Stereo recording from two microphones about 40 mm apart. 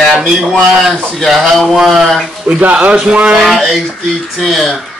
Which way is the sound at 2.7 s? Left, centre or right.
Right.